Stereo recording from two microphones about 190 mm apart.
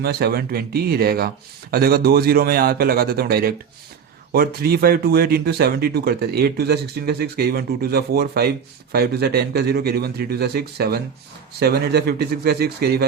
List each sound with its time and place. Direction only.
0.0 s a man's voice: 55° right (ahead or behind)